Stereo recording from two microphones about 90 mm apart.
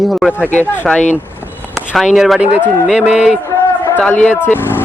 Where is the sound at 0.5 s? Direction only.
20° left (ahead or behind).